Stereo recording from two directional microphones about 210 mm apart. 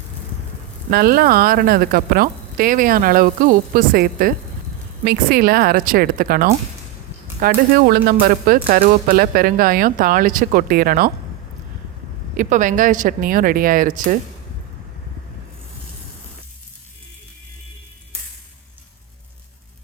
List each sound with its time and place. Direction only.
0.9 s a woman's voice: 45° right (ahead or behind)
12.4 s speech: 35° right (ahead or behind)